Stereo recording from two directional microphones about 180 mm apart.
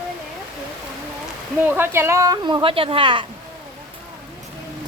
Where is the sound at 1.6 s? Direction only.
10° right (ahead or behind); by 3.3 s 30° right (ahead or behind).